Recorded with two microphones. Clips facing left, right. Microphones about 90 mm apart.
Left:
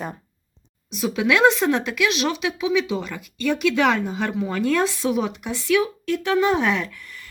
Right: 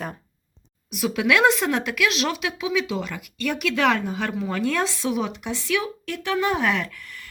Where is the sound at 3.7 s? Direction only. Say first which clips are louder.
Left 1 dB; 15° left (ahead or behind); by 4.8 s 5° right (ahead or behind).